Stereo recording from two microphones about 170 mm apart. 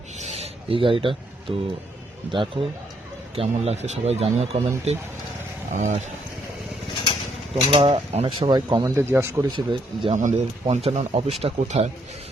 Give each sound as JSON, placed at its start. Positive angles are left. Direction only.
{"t": 0.2, "sound": "rub", "side_deg": -40}
{"t": 2.3, "sound": "speech", "side_deg": -30}
{"t": 7.5, "sound": "speech", "side_deg": -30}
{"t": 9.0, "sound": "speech", "side_deg": -15}
{"t": 9.6, "sound": "speech", "side_deg": -30}
{"t": 10.2, "sound": "speech", "side_deg": -45}